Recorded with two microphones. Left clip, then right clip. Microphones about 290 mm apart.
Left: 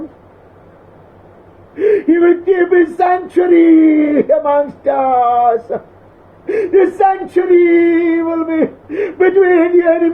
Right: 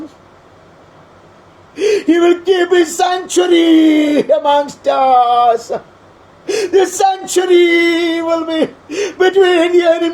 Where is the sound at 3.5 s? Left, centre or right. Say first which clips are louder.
Left 1 dB; right.